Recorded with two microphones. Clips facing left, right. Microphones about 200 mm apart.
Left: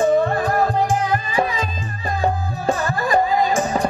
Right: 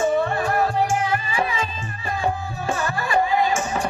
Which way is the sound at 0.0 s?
35° left (ahead or behind).